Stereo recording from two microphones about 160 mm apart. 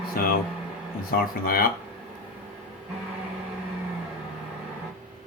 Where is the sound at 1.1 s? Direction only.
65° left (ahead or behind).